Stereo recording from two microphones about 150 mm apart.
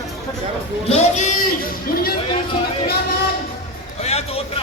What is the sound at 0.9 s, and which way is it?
Speech, 50° left (ahead or behind).